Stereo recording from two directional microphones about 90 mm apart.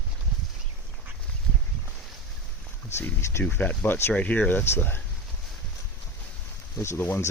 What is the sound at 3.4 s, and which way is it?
Speech, 20° left (ahead or behind).